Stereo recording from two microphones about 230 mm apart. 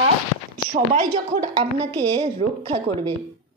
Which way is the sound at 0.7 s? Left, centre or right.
Right.